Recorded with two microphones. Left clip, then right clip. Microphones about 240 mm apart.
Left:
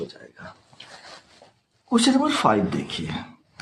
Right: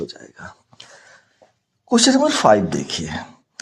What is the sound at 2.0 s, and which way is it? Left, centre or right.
Speech, right.